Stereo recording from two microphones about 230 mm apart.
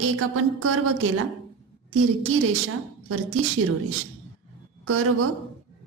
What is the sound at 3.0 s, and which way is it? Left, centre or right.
Speech, right.